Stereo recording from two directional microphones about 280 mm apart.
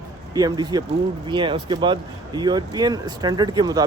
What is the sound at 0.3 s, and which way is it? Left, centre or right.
Speech, centre.